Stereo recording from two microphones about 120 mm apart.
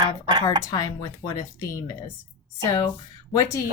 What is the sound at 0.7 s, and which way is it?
Speech, 30° left (ahead or behind).